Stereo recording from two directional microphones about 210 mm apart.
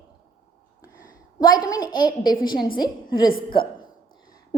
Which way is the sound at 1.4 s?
20° left (ahead or behind).